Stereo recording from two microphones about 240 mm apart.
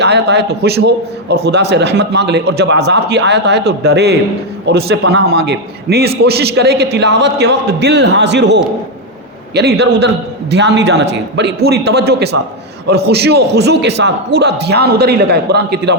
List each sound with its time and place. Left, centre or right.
0.0 s a man's voice: right